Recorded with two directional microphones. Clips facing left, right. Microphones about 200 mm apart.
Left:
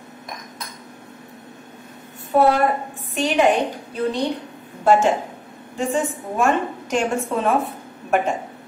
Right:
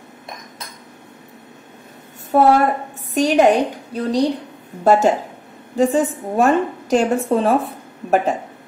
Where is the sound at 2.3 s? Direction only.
45° right (ahead or behind).